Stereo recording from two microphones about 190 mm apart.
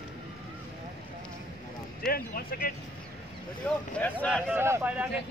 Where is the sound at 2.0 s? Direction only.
50° left (ahead or behind).